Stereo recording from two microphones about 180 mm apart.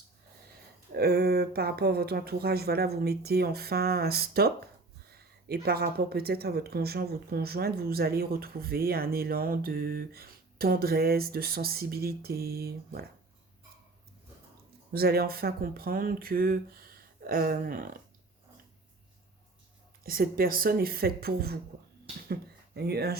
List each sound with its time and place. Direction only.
0.9 s speech: 60° right (ahead or behind)
14.9 s speech: 60° right (ahead or behind)
20.1 s speech: 55° right (ahead or behind)